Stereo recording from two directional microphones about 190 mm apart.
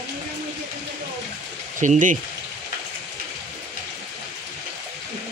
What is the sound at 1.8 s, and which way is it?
Speech, 40° right (ahead or behind).